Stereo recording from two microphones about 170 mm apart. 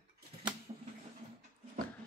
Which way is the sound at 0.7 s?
35° right (ahead or behind).